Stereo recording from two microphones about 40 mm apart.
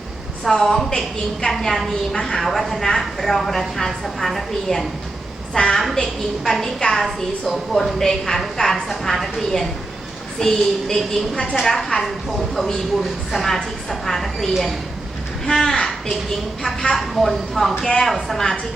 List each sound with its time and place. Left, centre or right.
0.5 s a woman's voice: centre
2.5 s speech: centre
5.5 s a woman's voice: centre
6.0 s a woman's voice: centre
15.4 s a woman's voice: centre
17.8 s a woman's voice: centre
18.1 s speech: centre